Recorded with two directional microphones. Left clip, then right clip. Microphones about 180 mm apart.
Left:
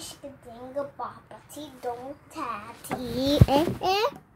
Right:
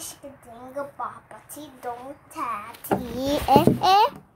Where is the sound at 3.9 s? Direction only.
20° left (ahead or behind).